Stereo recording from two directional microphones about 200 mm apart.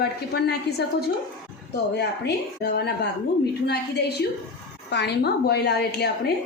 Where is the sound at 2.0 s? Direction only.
55° left (ahead or behind).